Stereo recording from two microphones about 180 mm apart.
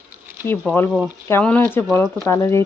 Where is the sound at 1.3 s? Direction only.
10° left (ahead or behind).